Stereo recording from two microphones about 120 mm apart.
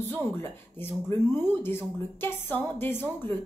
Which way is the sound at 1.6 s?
20° left (ahead or behind).